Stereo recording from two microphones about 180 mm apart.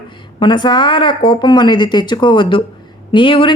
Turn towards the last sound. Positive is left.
turn(degrees=30)  # may be behind; listen again after turning